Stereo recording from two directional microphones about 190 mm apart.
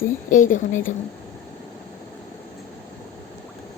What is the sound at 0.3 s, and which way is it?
Speech, 45° left (ahead or behind).